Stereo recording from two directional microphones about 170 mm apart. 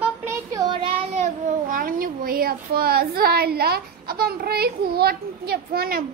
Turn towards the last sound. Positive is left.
turn(degrees=-60)  # may be behind; listen again after turning